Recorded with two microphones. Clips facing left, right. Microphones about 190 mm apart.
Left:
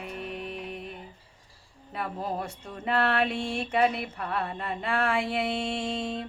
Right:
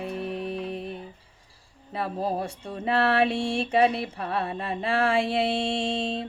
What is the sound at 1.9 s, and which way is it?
Speech, 30° right (ahead or behind).